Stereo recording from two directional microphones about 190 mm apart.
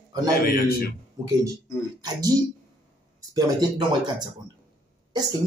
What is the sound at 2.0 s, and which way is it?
Speech, 20° right (ahead or behind).